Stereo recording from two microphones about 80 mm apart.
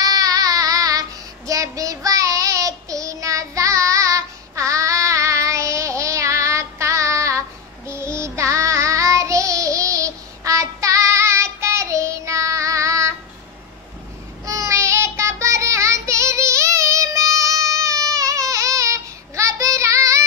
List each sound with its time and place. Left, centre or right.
0.0 s child singing: right
14.4 s child singing: right